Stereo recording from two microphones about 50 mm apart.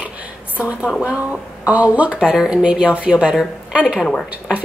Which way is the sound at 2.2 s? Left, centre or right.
Centre.